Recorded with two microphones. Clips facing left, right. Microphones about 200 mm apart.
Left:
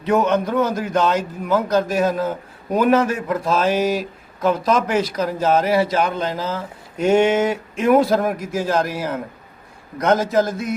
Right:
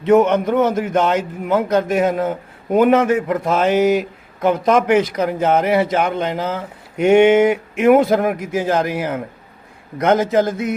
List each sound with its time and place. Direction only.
0.0 s a man's voice: 25° right (ahead or behind)